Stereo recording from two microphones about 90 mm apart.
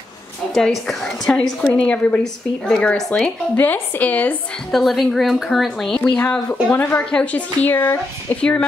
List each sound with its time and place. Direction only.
0.6 s a woman's voice: 5° left (ahead or behind)
4.7 s a woman's voice: centre (ahead or behind)
6.1 s a woman's voice: 15° left (ahead or behind)
8.4 s a woman's voice: 10° left (ahead or behind)